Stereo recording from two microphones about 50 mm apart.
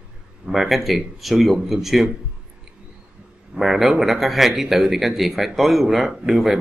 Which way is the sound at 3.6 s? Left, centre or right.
Centre.